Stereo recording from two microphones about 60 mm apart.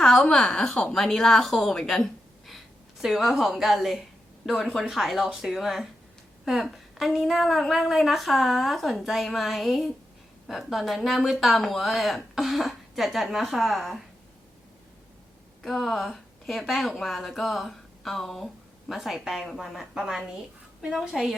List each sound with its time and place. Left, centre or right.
0.0 s a sound: centre
0.4 s a woman's voice: centre
0.9 s a woman's voice: centre
2.5 s a woman's voice: centre
15.6 s a woman's voice: centre